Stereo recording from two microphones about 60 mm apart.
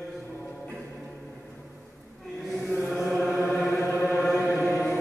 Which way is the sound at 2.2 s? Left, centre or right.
Centre.